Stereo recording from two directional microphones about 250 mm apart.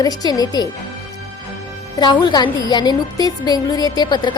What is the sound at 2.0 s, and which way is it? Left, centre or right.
A woman's voice, centre.